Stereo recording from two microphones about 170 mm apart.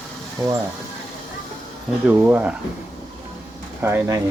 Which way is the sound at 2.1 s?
10° right (ahead or behind).